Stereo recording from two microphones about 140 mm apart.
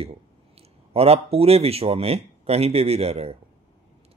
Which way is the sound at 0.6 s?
45° right (ahead or behind).